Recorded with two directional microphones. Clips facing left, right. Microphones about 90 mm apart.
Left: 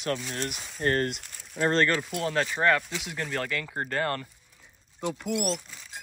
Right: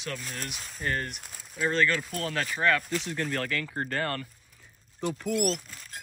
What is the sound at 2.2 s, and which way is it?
Speech, 25° left (ahead or behind).